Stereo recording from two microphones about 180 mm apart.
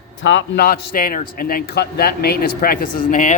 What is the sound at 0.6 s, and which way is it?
A man's voice, 55° left (ahead or behind).